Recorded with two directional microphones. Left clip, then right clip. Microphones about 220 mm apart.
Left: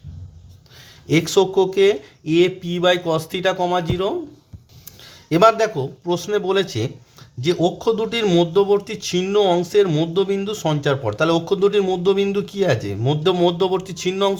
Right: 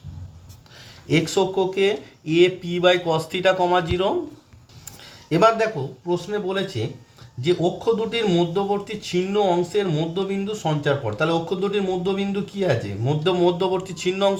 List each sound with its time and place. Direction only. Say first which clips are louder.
1.0 s speech: left 4 dB; 30° left (ahead or behind)